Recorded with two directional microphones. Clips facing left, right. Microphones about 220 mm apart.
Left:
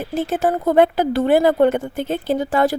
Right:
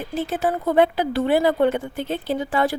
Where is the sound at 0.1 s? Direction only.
45° left (ahead or behind).